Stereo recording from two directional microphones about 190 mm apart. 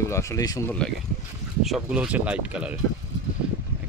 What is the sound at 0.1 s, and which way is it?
Speech, 15° left (ahead or behind).